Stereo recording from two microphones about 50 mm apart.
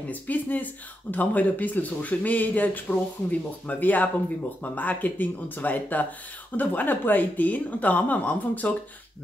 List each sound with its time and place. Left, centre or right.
0.1 s speech: left